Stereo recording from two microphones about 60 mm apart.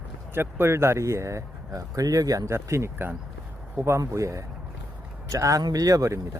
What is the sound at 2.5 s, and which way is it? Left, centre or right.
Speech, right.